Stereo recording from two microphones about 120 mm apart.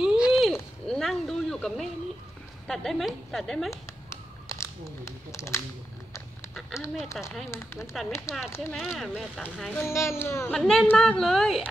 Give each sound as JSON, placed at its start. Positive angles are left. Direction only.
{"t": 0.0, "sound": "a sound", "side_deg": -5}
{"t": 2.6, "sound": "a woman's voice", "side_deg": 5}
{"t": 4.1, "sound": "a sound", "side_deg": 25}
{"t": 6.5, "sound": "speech", "side_deg": -5}
{"t": 7.5, "sound": "speech", "side_deg": 20}
{"t": 8.5, "sound": "a woman's voice", "side_deg": -5}
{"t": 9.8, "sound": "speech", "side_deg": 20}
{"t": 10.5, "sound": "a woman's voice", "side_deg": 5}